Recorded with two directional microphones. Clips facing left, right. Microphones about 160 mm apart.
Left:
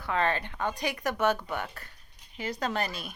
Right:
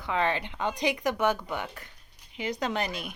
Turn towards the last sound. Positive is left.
turn(degrees=-15)  # may be behind; listen again after turning